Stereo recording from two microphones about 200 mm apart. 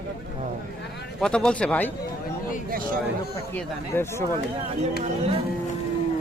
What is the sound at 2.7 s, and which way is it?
Speech, 45° right (ahead or behind).